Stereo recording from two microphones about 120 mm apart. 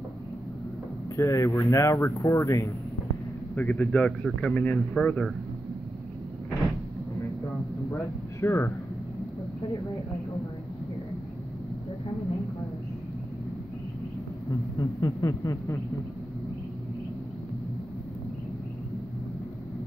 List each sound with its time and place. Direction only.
1.1 s speech: 25° left (ahead or behind)
3.5 s speech: 10° left (ahead or behind)
7.9 s speech: 20° left (ahead or behind)
14.8 s speech: 30° left (ahead or behind)